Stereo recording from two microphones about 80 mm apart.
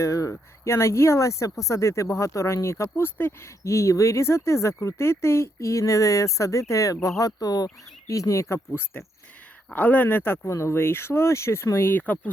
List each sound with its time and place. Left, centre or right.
0.0 s speech: left
3.6 s speech: left
9.7 s speech: left